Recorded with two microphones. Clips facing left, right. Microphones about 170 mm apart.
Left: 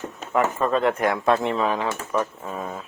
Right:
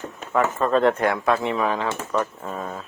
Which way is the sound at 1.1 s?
20° left (ahead or behind).